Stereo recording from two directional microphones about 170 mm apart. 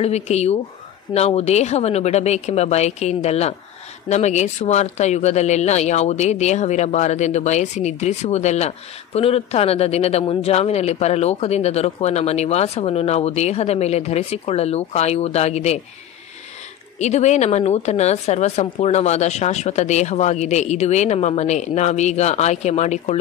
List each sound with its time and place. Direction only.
0.0 s speech: 40° left (ahead or behind)
17.0 s speech: 40° left (ahead or behind)